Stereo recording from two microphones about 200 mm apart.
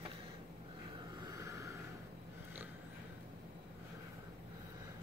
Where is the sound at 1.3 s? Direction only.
15° right (ahead or behind).